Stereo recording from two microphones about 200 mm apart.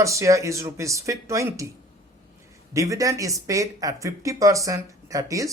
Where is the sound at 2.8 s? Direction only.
15° right (ahead or behind).